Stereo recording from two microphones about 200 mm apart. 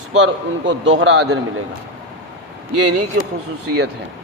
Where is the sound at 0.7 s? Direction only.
65° right (ahead or behind).